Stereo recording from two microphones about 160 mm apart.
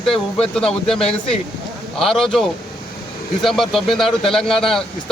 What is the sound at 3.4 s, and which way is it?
A man's voice, centre (ahead or behind).